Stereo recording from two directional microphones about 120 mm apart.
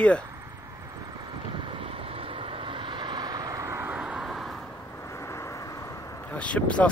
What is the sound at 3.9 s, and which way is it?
Vehicle, 10° right (ahead or behind).